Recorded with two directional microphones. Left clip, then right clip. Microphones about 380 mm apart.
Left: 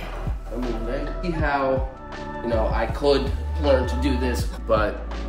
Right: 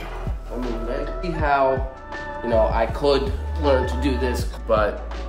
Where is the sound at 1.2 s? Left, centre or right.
Centre.